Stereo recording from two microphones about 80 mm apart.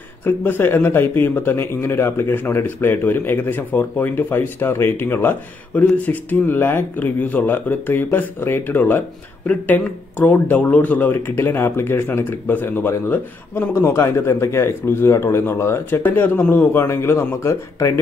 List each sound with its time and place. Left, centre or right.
0.2 s a man's voice: left
13.7 s speech: left
16.8 s speech: left